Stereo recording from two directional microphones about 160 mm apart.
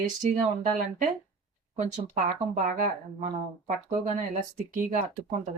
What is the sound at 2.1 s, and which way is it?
Speech, 55° right (ahead or behind).